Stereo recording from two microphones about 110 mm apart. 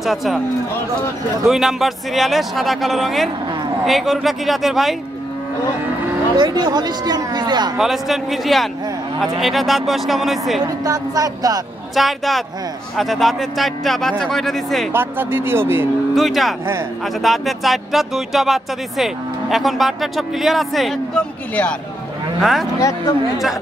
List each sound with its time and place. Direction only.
0.0 s speech: centre (ahead or behind)
1.5 s speech: 5° right (ahead or behind)
6.3 s speech: 40° right (ahead or behind)
7.7 s speech: 5° right (ahead or behind)
10.6 s speech: 35° right (ahead or behind)
11.9 s speech: centre (ahead or behind)
14.9 s speech: 20° right (ahead or behind)
16.2 s speech: centre (ahead or behind)
22.4 s speech: centre (ahead or behind)
22.8 s speech: 30° left (ahead or behind)